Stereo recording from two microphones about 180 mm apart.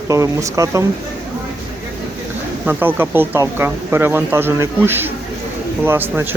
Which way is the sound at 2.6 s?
10° right (ahead or behind).